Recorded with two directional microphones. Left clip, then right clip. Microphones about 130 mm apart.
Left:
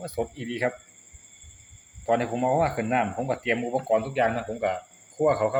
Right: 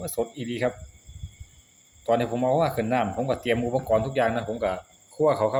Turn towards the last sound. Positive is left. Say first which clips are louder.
# right 1 dB
turn(degrees=-20)  # may be behind; listen again after turning